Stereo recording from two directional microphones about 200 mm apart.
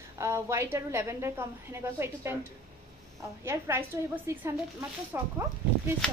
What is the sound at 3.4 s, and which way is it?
A woman's voice, 10° right (ahead or behind).